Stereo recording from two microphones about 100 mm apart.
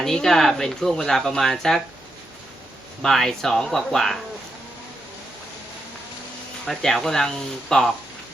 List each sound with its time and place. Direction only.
0.0 s speech: 5° left (ahead or behind)
3.0 s speech: 5° left (ahead or behind)
6.7 s speech: 5° left (ahead or behind)